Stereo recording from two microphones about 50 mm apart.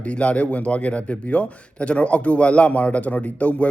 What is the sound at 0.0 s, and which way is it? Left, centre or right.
Speech, left.